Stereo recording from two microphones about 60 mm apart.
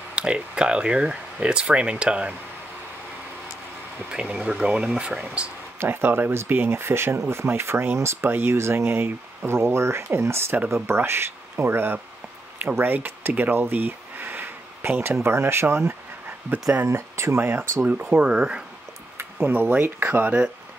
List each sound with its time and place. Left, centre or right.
0.1 s speech: centre
4.1 s speech: centre
5.8 s speech: right
13.6 s a sound: right
15.2 s speech: right
16.3 s dog: right
16.9 s speech: right
17.4 s speech: right; by 18.6 s centre
19.4 s speech: right